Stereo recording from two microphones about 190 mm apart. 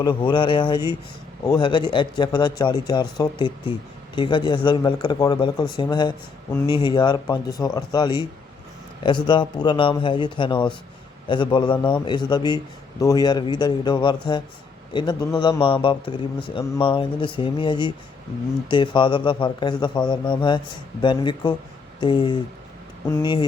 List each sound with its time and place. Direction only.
0.0 s a man's voice: 25° left (ahead or behind)